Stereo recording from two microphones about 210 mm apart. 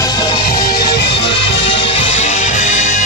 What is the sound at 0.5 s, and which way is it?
Music, 45° left (ahead or behind).